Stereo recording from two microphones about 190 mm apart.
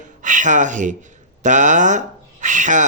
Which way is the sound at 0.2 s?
40° right (ahead or behind).